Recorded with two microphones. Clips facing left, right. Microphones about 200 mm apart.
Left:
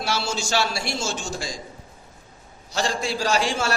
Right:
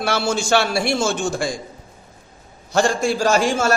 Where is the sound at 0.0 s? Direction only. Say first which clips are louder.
Right 6 dB; 55° right (ahead or behind).